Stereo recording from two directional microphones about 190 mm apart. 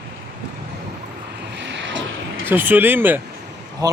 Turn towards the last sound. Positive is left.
turn(degrees=-20)  # may be behind; listen again after turning